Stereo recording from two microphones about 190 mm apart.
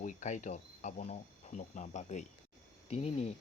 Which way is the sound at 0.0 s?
40° left (ahead or behind).